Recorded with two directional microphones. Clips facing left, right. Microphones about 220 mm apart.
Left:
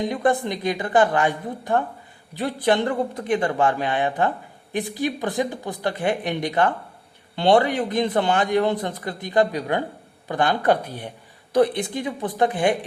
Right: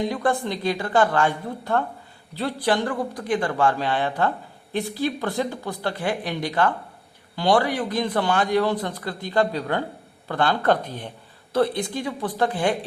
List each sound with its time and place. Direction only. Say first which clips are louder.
0.1 s speech: left 2 dB; 20° left (ahead or behind)